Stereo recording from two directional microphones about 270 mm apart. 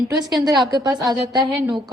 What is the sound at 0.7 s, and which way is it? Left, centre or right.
Speech, centre.